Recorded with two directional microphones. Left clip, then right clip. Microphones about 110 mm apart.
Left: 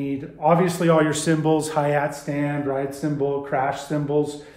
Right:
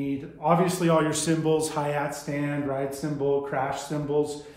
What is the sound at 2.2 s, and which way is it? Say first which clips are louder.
Speech: left 4 dB; 30° left (ahead or behind).